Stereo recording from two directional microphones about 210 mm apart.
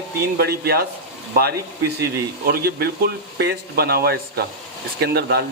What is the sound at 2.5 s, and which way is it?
Speech, 50° right (ahead or behind).